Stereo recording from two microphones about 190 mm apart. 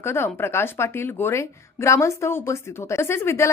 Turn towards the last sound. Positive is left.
turn(degrees=15)  # may be behind; listen again after turning